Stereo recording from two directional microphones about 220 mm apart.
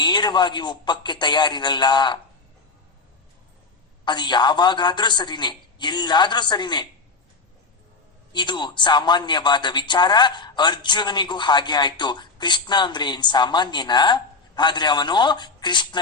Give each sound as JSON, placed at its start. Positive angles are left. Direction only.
{"t": 0.0, "sound": "a man's voice", "side_deg": 20}
{"t": 4.0, "sound": "a man's voice", "side_deg": 20}
{"t": 8.3, "sound": "a man's voice", "side_deg": 20}